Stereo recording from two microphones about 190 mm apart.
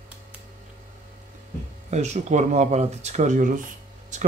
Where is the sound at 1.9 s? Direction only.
35° right (ahead or behind).